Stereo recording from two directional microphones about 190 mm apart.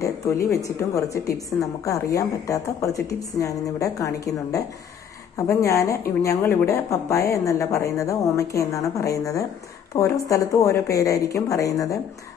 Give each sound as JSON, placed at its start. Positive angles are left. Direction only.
{"t": 0.0, "sound": "a woman's voice", "side_deg": 15}